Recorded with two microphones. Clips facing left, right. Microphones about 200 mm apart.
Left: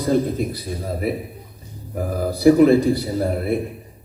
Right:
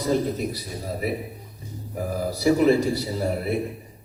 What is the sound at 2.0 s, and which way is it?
A man's voice, 55° left (ahead or behind).